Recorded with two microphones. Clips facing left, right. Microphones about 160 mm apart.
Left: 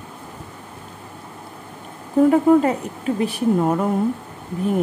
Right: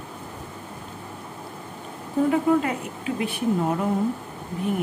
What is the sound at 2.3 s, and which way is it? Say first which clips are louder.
A woman's voice: left 6 dB; 40° left (ahead or behind).